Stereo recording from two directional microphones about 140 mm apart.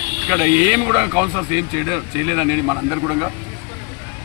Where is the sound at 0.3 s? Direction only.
20° right (ahead or behind).